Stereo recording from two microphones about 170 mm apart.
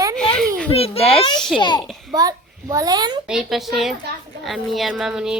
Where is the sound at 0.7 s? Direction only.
35° left (ahead or behind).